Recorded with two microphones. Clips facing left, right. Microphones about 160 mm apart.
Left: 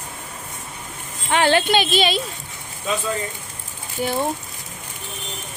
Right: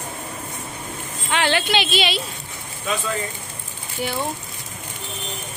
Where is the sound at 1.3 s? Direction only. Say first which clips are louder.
Left 4 dB; 40° left (ahead or behind).